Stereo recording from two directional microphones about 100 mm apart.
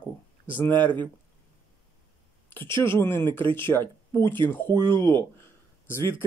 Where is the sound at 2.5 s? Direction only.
25° left (ahead or behind).